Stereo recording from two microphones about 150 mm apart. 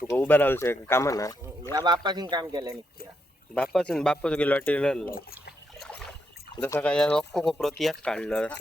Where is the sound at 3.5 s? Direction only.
5° left (ahead or behind).